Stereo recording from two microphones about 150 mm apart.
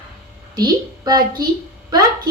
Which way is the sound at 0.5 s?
25° right (ahead or behind).